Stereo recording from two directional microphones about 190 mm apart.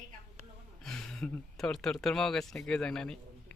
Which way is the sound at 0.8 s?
5° left (ahead or behind).